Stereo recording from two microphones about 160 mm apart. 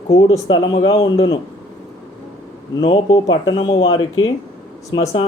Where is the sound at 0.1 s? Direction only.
25° left (ahead or behind).